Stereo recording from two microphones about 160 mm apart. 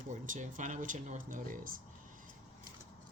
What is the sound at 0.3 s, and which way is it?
Speech, 50° right (ahead or behind).